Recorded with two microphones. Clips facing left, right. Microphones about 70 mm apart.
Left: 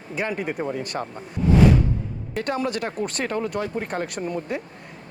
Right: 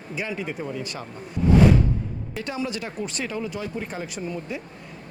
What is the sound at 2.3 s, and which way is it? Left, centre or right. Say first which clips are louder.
Speech: left 5 dB; left.